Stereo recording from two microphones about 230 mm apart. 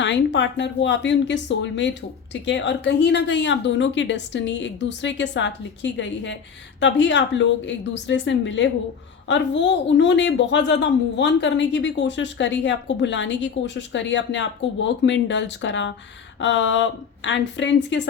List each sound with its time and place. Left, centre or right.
0.0 s a woman's voice: left